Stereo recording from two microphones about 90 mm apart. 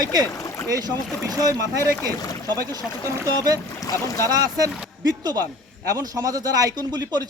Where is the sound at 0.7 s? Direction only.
45° right (ahead or behind).